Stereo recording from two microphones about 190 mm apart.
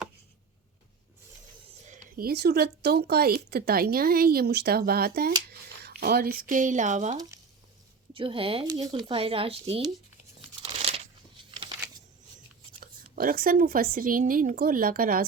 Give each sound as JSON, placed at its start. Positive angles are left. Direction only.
{"t": 1.9, "sound": "speech", "side_deg": -50}
{"t": 8.1, "sound": "speech", "side_deg": -30}
{"t": 10.6, "sound": "crumpling", "side_deg": -30}
{"t": 12.8, "sound": "speech", "side_deg": -50}